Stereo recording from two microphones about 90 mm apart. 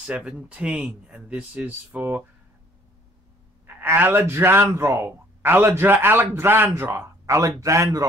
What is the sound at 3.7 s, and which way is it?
A man's voice, 20° right (ahead or behind).